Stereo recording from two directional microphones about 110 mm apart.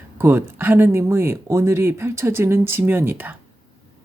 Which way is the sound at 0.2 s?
20° right (ahead or behind).